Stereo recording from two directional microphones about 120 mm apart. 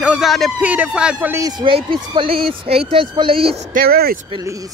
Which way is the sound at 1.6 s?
45° right (ahead or behind).